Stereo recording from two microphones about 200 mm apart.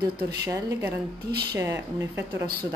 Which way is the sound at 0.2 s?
15° right (ahead or behind).